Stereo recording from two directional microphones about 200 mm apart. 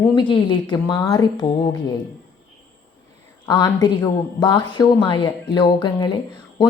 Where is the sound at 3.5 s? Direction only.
20° left (ahead or behind).